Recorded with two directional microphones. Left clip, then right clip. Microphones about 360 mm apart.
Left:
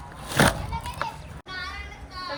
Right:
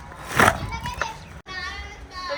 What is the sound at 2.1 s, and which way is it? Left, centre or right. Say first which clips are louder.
Music: right 4 dB; centre.